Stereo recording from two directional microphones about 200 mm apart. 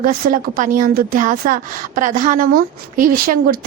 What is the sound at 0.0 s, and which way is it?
Speech, 45° right (ahead or behind).